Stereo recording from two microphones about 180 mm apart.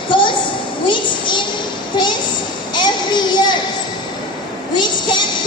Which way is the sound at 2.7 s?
25° left (ahead or behind).